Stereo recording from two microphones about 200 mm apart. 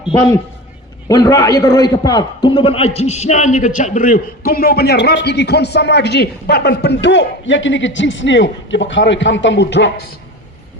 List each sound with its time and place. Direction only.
1.0 s a man's voice: 15° left (ahead or behind); by 10.1 s 60° left (ahead or behind)